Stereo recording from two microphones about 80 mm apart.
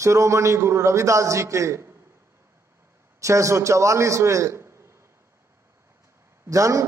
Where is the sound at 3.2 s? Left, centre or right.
Right.